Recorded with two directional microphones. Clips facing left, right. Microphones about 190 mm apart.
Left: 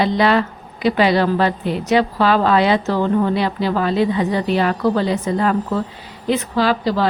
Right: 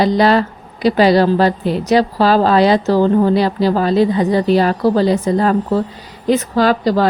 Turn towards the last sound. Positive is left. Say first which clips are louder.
# right 4 dB
turn(degrees=-45)  # may be behind; listen again after turning